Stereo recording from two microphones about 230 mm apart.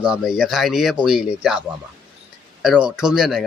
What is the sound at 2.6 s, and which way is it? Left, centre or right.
Speech, centre.